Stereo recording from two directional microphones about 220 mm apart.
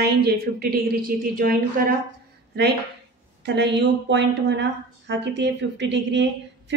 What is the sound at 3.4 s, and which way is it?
Speech, 50° right (ahead or behind).